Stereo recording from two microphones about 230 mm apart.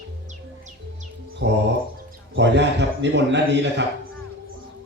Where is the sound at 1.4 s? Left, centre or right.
Right.